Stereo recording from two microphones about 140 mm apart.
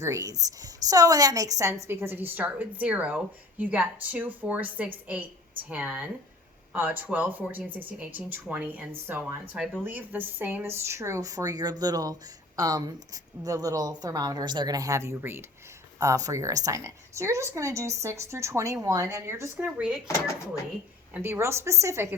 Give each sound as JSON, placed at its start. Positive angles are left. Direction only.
{"t": 0.0, "sound": "a woman's voice", "side_deg": -20}
{"t": 21.1, "sound": "a woman's voice", "side_deg": -15}